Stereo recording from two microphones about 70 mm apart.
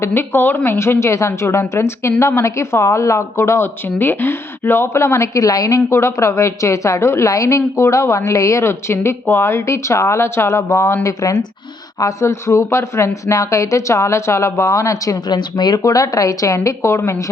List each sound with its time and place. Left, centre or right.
0.0 s a woman's voice: left
3.8 s a woman's voice: left
15.3 s speech: left
15.8 s a woman's voice: left